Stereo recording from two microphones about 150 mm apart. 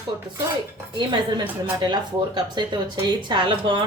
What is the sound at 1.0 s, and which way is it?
A woman's voice, 30° right (ahead or behind).